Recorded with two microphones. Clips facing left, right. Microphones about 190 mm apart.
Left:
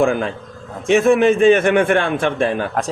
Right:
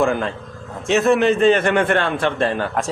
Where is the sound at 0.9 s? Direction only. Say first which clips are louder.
Left 3 dB; 50° left (ahead or behind).